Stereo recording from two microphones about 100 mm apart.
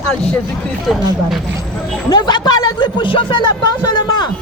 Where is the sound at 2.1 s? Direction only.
45° left (ahead or behind).